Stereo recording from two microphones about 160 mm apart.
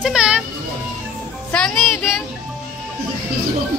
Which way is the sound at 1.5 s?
5° left (ahead or behind).